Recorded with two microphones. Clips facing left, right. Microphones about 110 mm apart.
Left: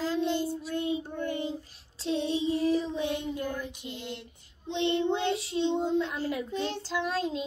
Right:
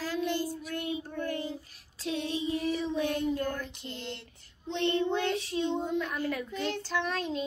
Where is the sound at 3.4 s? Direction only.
10° left (ahead or behind).